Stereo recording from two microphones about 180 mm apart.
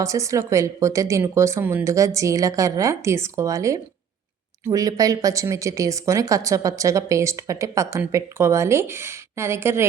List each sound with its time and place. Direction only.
0.0 s speech: 15° right (ahead or behind)